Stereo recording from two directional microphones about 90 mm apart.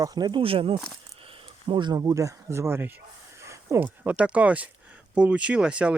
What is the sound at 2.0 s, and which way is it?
Speech, 40° right (ahead or behind).